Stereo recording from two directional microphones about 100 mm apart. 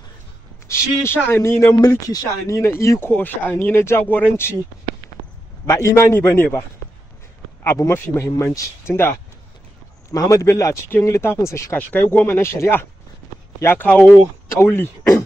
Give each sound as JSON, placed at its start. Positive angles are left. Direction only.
{"t": 0.7, "sound": "speech", "side_deg": 25}
{"t": 5.7, "sound": "speech", "side_deg": 30}
{"t": 7.6, "sound": "speech", "side_deg": 30}
{"t": 10.1, "sound": "speech", "side_deg": 35}
{"t": 13.8, "sound": "speech", "side_deg": 10}
{"t": 14.5, "sound": "speech", "side_deg": 25}